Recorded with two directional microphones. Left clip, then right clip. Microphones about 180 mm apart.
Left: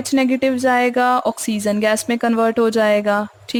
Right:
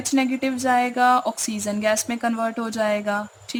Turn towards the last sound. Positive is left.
turn(degrees=40)  # may be behind; listen again after turning